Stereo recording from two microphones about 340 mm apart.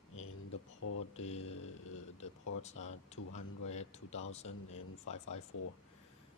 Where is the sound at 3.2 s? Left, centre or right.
Left.